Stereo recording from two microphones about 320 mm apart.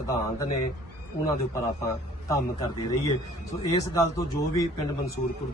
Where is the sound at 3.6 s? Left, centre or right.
Centre.